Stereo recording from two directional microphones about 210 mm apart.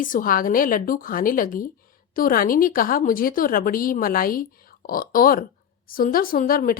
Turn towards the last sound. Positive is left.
turn(degrees=45)  # may be behind; listen again after turning